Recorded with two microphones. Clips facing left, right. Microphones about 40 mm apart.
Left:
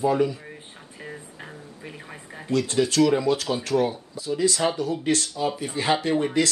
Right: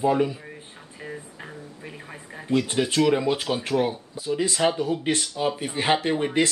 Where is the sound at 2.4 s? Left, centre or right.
Right.